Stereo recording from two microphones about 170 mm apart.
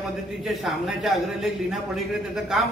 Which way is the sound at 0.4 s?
Centre (ahead or behind).